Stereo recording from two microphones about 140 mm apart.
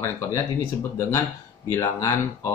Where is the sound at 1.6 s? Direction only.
20° left (ahead or behind).